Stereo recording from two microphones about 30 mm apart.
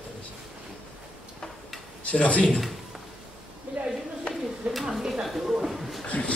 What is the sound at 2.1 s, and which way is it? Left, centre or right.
Speech, left.